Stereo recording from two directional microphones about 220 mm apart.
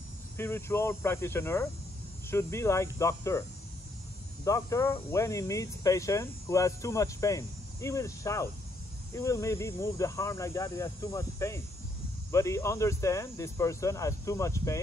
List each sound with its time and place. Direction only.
0.4 s speech: 10° left (ahead or behind)
4.5 s speech: 15° left (ahead or behind)